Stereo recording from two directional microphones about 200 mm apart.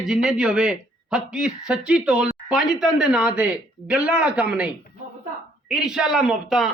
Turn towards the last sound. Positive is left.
turn(degrees=0)  # may be behind; listen again after turning